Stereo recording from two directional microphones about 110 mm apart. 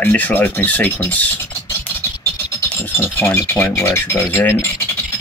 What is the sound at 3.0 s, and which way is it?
Mechanisms, 20° left (ahead or behind).